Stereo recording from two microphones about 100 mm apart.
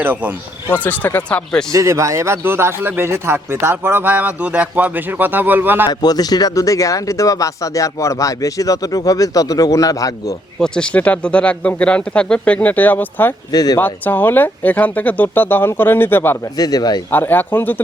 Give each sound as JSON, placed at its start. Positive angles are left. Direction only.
{"t": 0.0, "sound": "speech", "side_deg": -15}
{"t": 0.9, "sound": "speech", "side_deg": 15}
{"t": 1.7, "sound": "speech", "side_deg": -30}
{"t": 5.9, "sound": "speech", "side_deg": 40}
{"t": 10.6, "sound": "speech", "side_deg": 10}
{"t": 13.5, "sound": "speech", "side_deg": 40}
{"t": 13.7, "sound": "speech", "side_deg": 20}
{"t": 16.6, "sound": "speech", "side_deg": 40}
{"t": 17.1, "sound": "speech", "side_deg": 20}